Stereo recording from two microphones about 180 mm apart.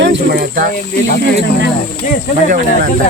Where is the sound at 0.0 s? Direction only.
75° right (ahead or behind).